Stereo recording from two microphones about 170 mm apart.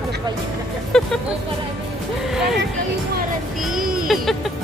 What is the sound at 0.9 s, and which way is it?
Speech, 5° left (ahead or behind).